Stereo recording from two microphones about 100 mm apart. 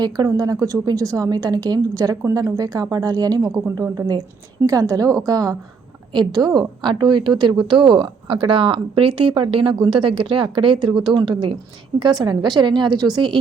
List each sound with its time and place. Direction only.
0.3 s a woman's voice: 35° right (ahead or behind)